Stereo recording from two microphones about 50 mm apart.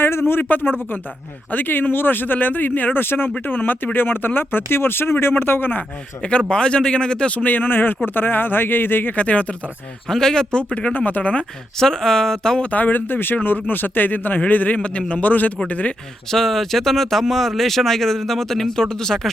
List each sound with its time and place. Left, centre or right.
0.0 s speech: left
6.5 s a man's voice: centre; by 9.1 s left
9.1 s a man's voice: left
10.1 s a man's voice: centre; by 11.4 s left
11.8 s a man's voice: centre
12.7 s speech: left
16.3 s speech: centre